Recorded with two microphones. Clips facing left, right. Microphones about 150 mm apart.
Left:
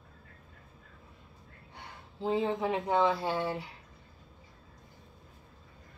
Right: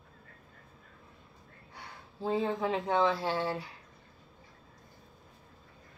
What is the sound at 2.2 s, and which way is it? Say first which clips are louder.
Speech: left 1 dB; 20° left (ahead or behind).